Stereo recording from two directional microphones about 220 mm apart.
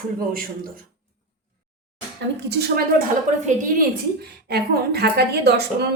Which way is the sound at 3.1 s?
35° right (ahead or behind).